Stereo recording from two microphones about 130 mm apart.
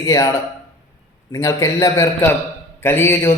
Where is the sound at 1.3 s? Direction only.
25° left (ahead or behind).